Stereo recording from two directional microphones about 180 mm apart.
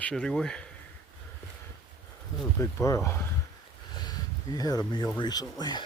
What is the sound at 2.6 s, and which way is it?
Speech, 15° left (ahead or behind).